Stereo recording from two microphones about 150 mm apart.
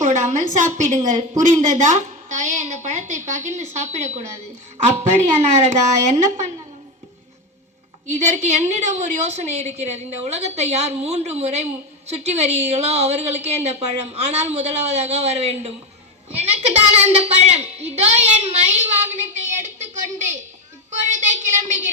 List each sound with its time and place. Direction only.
0.0 s a woman's voice: 55° right (ahead or behind)
5.4 s a woman's voice: 45° right (ahead or behind)
8.0 s a woman's voice: 55° right (ahead or behind)